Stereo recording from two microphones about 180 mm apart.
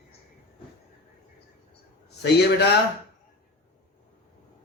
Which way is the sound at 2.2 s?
65° left (ahead or behind).